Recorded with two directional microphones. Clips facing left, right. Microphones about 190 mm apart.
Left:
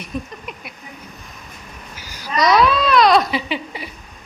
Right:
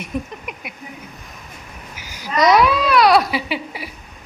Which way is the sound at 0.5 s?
15° right (ahead or behind).